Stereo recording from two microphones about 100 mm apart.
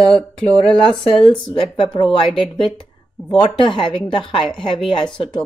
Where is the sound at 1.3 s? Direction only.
50° left (ahead or behind).